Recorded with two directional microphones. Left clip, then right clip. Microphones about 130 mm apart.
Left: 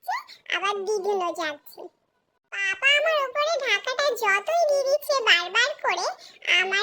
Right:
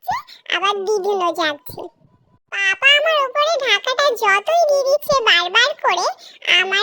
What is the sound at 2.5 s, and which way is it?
A child's voice, 50° right (ahead or behind).